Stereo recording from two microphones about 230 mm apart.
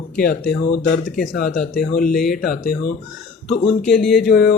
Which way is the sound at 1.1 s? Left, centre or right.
Left.